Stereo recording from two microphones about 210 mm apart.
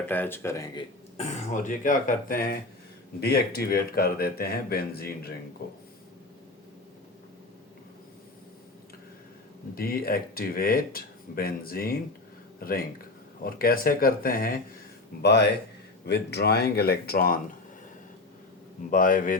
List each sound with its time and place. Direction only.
0.1 s speech: 10° left (ahead or behind)
1.1 s speech: 35° left (ahead or behind)
9.7 s speech: 45° left (ahead or behind)
18.9 s speech: 40° left (ahead or behind)